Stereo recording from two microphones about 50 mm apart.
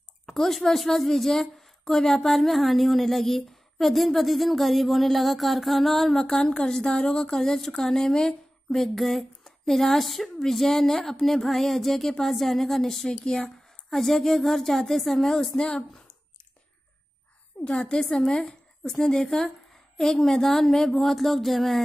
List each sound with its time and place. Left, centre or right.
0.3 s a woman's voice: centre
17.6 s a woman's voice: left
18.9 s a woman's voice: centre